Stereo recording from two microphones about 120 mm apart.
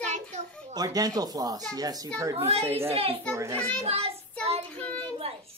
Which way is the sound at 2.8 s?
55° right (ahead or behind).